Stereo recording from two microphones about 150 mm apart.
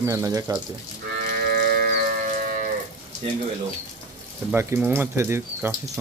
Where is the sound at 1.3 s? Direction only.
85° right.